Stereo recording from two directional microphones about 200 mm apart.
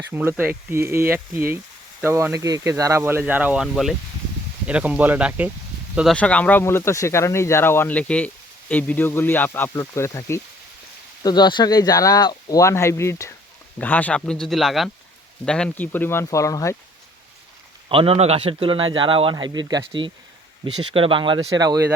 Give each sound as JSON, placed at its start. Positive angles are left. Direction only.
{"t": 0.1, "sound": "speech", "side_deg": -10}
{"t": 6.0, "sound": "speech", "side_deg": 5}
{"t": 17.8, "sound": "speech", "side_deg": -25}